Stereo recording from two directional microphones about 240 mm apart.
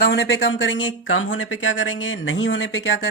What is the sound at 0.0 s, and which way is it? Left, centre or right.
A woman's voice, left.